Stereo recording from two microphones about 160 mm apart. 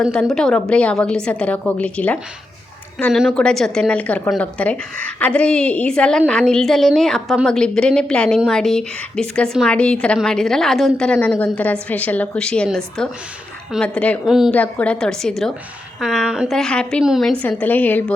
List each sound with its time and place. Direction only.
0.0 s a woman's voice: centre (ahead or behind)
14.3 s a woman's voice: 5° right (ahead or behind)
14.5 s a woman's voice: 10° left (ahead or behind)
17.4 s a woman's voice: 10° left (ahead or behind)